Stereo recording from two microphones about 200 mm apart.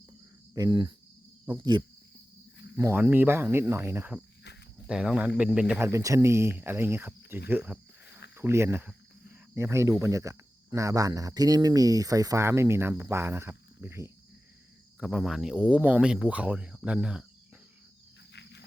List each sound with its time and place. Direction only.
0.5 s cricket: 20° right (ahead or behind)
2.7 s speech: 10° right (ahead or behind)
18.3 s cricket: 60° left (ahead or behind)